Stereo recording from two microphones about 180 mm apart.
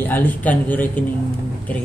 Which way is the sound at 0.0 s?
10° left (ahead or behind).